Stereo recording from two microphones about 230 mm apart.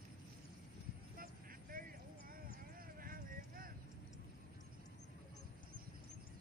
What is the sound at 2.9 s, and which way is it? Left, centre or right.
Clip-clop, right.